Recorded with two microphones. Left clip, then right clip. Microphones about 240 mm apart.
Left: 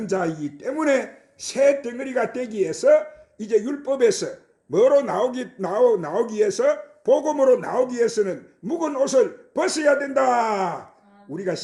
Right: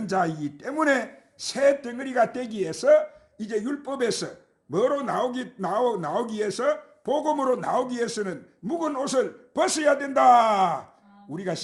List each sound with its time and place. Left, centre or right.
0.0 s a man's voice: right